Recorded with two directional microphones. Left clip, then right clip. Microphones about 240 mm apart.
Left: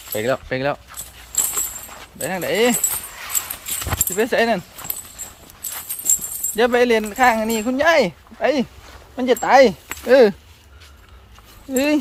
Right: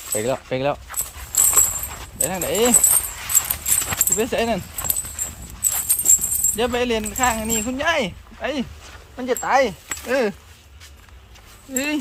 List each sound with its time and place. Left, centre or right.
0.1 s speech: centre
1.4 s horse: centre
2.2 s speech: centre
3.8 s speech: centre
6.6 s speech: centre
9.1 s speech: left
11.7 s speech: left